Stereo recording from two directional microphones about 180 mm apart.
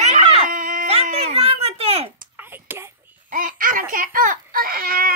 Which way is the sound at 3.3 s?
50° right (ahead or behind).